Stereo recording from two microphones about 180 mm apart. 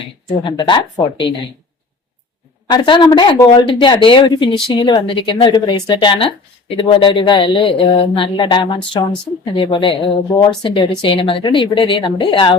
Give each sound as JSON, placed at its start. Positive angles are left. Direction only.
{"t": 0.4, "sound": "a woman's voice", "side_deg": 25}
{"t": 2.6, "sound": "a woman's voice", "side_deg": 25}